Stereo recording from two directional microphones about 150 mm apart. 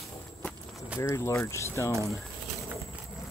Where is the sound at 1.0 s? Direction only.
20° left (ahead or behind).